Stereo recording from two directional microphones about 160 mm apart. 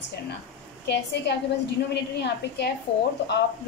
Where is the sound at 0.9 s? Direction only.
90° left.